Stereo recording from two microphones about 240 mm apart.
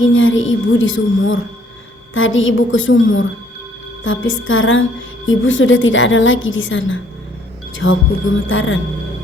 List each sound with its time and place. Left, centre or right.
0.0 s a woman's voice: left